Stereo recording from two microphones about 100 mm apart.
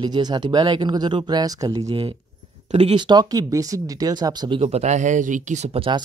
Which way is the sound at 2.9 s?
45° right (ahead or behind).